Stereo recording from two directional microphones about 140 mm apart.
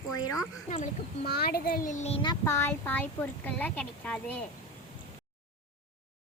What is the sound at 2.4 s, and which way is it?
Speech, 20° left (ahead or behind).